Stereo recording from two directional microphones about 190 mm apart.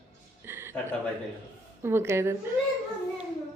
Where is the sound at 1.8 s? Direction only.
15° right (ahead or behind).